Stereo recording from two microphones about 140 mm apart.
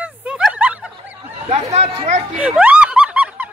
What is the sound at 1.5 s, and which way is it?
Chatter, 55° right (ahead or behind).